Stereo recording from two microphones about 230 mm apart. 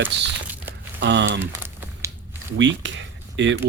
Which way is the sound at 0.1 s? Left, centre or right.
Right.